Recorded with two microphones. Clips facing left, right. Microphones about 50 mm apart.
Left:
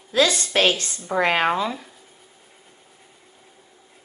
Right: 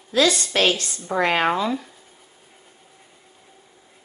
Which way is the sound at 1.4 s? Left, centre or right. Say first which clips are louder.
Right 1 dB; centre.